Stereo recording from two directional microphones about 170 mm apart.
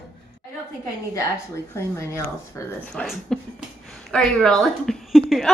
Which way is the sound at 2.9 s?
5° left (ahead or behind).